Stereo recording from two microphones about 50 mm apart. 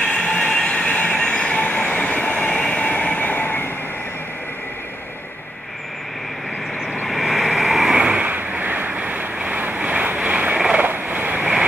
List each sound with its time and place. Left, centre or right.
0.0 s train: left
2.7 s vehicle: left
7.1 s vehicle: centre
8.1 s waves: right
8.5 s waves: right
9.8 s boat: right
10.8 s vehicle: right